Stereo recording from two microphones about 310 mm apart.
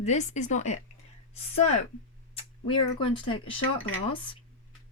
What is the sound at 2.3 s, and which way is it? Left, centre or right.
Speech, centre.